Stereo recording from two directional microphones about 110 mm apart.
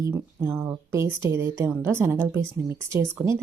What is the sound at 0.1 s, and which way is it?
Speech, 20° right (ahead or behind).